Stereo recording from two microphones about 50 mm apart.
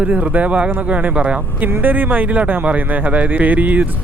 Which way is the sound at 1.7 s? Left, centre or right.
Right.